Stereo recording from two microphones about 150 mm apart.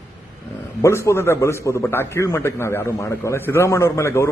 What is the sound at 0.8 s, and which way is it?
A man's voice, 20° left (ahead or behind).